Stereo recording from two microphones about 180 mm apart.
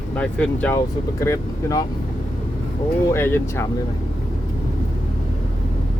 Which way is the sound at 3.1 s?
10° left (ahead or behind).